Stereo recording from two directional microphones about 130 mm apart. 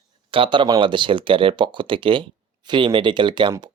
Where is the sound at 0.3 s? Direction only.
40° right (ahead or behind).